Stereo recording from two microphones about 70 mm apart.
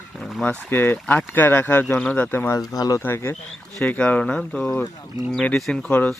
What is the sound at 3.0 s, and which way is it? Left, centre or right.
Speech, left.